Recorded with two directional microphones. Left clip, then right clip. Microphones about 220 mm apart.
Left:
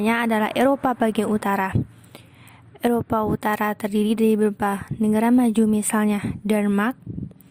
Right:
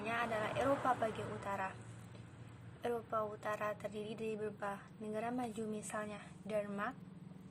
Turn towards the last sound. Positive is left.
turn(degrees=50)  # may be behind; listen again after turning